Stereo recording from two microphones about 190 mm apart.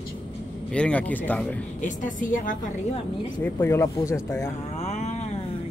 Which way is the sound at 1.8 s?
45° left (ahead or behind).